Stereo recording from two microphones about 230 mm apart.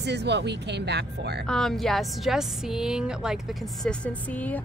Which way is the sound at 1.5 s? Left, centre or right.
Centre.